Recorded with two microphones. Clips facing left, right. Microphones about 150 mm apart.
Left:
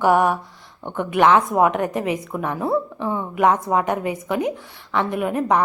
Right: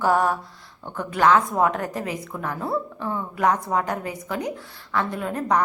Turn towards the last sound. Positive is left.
turn(degrees=20)  # may be behind; listen again after turning